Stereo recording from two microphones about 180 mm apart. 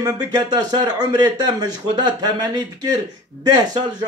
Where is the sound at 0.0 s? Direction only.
20° right (ahead or behind).